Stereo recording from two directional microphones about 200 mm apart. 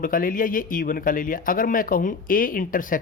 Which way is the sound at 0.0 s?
45° left (ahead or behind).